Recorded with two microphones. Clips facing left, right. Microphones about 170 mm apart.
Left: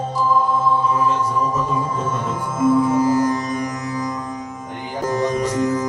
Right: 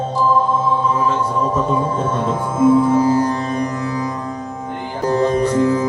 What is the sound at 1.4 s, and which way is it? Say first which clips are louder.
Music: right 3 dB; 30° right (ahead or behind).